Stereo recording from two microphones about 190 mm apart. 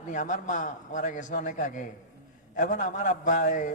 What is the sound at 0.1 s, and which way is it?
A man's voice, 40° left (ahead or behind).